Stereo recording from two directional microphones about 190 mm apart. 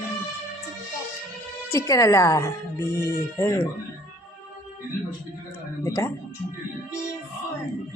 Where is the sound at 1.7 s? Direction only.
15° left (ahead or behind).